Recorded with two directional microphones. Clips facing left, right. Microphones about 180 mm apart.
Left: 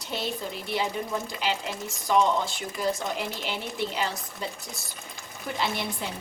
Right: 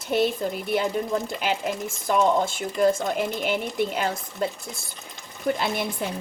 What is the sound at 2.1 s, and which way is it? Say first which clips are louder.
Speech: right 2 dB; 50° right (ahead or behind).